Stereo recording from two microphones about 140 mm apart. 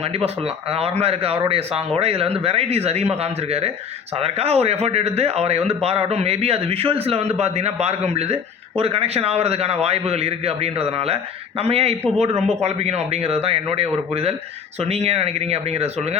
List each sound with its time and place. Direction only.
0.0 s a man's voice: 45° right (ahead or behind)
12.4 s speech: 5° left (ahead or behind)
12.6 s a man's voice: 50° right (ahead or behind)